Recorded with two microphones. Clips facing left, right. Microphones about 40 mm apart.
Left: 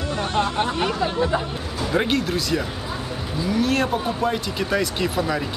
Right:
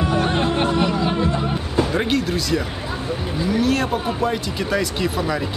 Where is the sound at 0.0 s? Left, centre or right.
Right.